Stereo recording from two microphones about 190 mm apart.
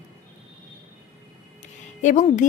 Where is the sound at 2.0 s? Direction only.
40° left (ahead or behind).